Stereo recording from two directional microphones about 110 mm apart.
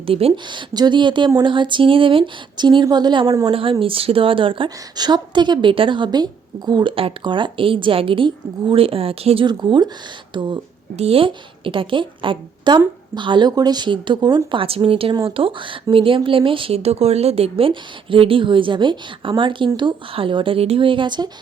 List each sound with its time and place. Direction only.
0.0 s speech: 60° right (ahead or behind)
0.4 s speech: 40° right (ahead or behind)
6.9 s speech: 50° right (ahead or behind)
10.9 s speech: 65° right (ahead or behind); by 21.2 s 45° right (ahead or behind)